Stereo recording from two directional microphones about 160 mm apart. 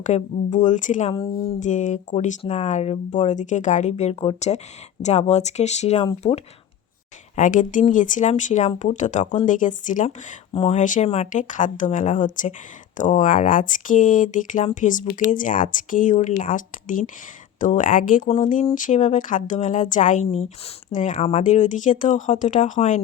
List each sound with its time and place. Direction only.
0.0 s speech: 50° left (ahead or behind)
7.3 s speech: 55° left (ahead or behind)
10.5 s speech: 40° left (ahead or behind)